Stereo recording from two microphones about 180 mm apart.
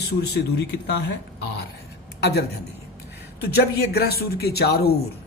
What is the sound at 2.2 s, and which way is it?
A woman's voice, 65° left (ahead or behind).